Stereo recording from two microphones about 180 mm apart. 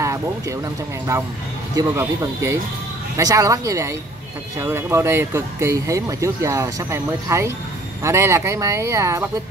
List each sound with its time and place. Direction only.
0.0 s speech: 15° right (ahead or behind)
1.8 s speech: 15° right (ahead or behind)